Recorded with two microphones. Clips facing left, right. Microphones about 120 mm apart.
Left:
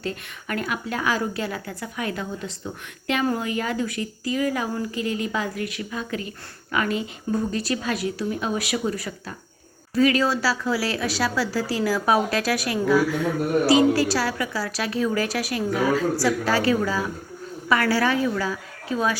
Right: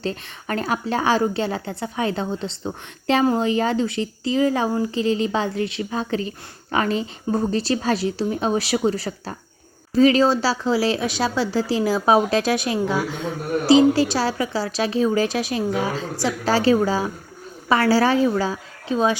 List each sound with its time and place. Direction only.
0.0 s a woman's voice: 30° right (ahead or behind)